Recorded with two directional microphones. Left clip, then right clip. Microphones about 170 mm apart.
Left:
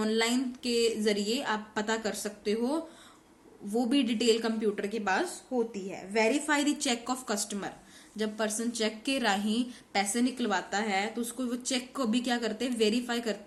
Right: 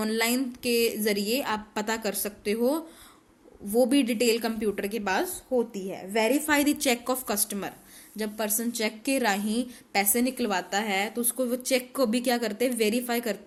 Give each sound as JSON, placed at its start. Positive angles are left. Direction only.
{"t": 0.0, "sound": "a woman's voice", "side_deg": -45}